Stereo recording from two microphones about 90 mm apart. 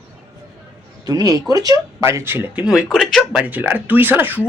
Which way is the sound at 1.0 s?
45° right (ahead or behind).